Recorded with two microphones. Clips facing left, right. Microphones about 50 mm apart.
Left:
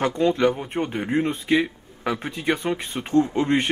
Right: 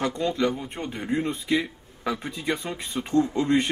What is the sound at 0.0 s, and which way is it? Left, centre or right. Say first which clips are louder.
A man's voice: left 5 dB; left.